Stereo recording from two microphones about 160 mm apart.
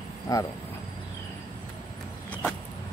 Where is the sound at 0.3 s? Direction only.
20° left (ahead or behind).